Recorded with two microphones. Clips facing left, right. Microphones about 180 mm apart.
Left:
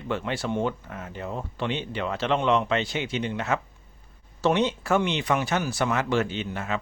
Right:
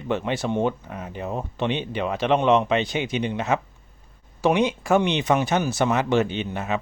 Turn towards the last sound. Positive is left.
turn(degrees=-20)  # may be behind; listen again after turning